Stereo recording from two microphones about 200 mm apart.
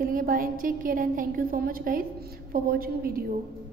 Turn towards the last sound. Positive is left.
turn(degrees=-45)  # may be behind; listen again after turning